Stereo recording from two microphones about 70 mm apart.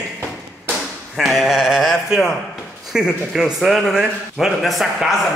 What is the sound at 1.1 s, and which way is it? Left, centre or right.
A man's voice, centre.